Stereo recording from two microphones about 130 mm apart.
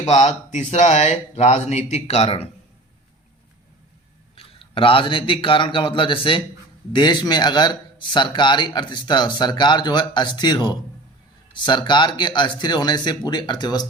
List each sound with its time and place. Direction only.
0.1 s speech: 60° left (ahead or behind)
4.4 s a man's voice: 45° left (ahead or behind)